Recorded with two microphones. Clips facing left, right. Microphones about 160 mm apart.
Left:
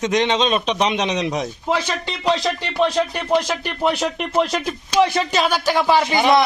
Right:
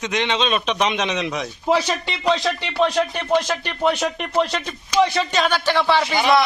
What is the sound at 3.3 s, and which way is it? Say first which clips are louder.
Speech: left 1 dB; 10° left (ahead or behind).